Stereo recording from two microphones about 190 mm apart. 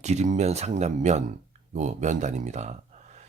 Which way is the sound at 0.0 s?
35° right (ahead or behind).